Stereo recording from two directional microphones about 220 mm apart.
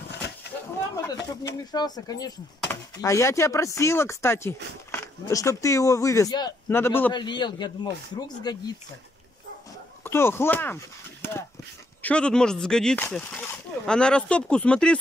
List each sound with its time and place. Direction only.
1.0 s speech: 15° left (ahead or behind)
10.0 s speech: 10° left (ahead or behind)
12.0 s speech: 5° left (ahead or behind)